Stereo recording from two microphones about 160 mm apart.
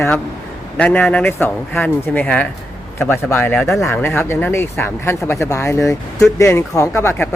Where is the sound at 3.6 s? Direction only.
Centre (ahead or behind).